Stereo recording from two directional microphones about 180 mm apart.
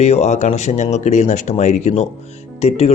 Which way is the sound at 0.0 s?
35° left (ahead or behind).